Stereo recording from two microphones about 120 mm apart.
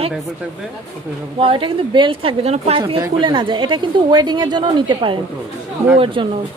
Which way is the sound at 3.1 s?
45° right (ahead or behind).